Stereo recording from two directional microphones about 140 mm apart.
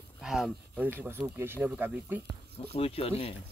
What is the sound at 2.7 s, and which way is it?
Speech, 45° left (ahead or behind).